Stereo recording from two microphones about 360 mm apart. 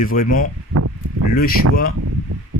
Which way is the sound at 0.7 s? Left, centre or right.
Right.